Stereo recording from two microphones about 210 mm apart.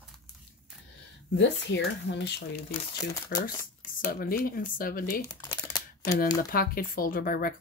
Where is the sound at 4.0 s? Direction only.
45° left (ahead or behind).